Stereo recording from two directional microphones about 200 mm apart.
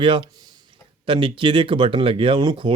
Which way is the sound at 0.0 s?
25° right (ahead or behind).